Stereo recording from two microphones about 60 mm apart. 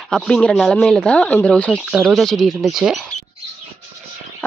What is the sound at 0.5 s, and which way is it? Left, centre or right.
Speech, centre.